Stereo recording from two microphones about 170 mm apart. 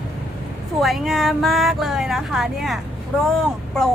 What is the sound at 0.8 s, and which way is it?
A woman's voice, centre (ahead or behind).